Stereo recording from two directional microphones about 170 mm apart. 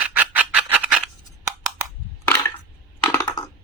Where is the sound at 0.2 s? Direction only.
10° right (ahead or behind).